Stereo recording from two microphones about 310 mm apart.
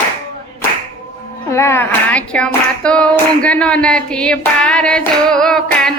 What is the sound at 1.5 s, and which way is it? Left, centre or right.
Hands, centre.